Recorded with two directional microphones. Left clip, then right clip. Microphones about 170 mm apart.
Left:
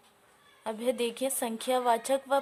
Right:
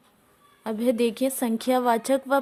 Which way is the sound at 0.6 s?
25° right (ahead or behind).